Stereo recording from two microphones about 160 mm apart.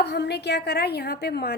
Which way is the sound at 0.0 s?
90° left.